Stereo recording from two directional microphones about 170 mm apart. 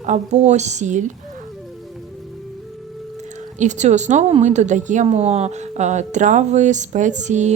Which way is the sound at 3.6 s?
45° right (ahead or behind).